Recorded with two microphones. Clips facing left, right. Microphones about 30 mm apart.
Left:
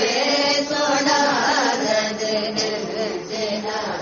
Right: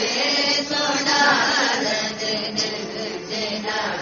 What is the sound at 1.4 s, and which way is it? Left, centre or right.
Carnatic music, right.